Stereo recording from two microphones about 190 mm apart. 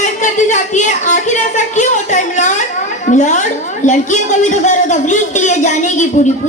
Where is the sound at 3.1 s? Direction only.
40° left (ahead or behind).